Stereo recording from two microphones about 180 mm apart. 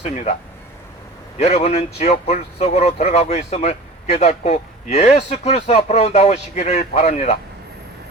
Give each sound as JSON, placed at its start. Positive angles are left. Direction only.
{"t": 0.0, "sound": "speech", "side_deg": 40}
{"t": 1.4, "sound": "speech", "side_deg": 35}